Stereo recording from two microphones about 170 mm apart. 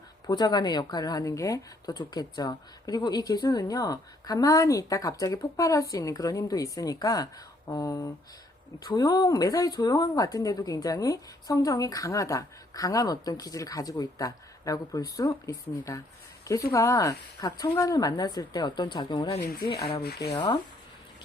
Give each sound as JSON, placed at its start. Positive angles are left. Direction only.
{"t": 0.3, "sound": "speech", "side_deg": 25}
{"t": 19.4, "sound": "speech", "side_deg": 60}
{"t": 20.0, "sound": "rub", "side_deg": 70}
{"t": 20.3, "sound": "speech", "side_deg": 25}